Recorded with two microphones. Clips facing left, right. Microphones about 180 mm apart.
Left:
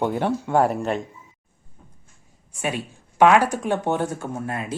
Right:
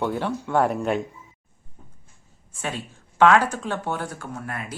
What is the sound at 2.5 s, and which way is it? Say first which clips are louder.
Speech: left 4 dB; 15° left (ahead or behind).